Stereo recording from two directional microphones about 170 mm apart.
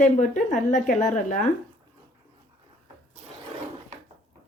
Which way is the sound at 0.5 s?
50° left (ahead or behind).